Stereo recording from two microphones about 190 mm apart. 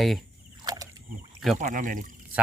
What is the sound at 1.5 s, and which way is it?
Speech, 40° right (ahead or behind).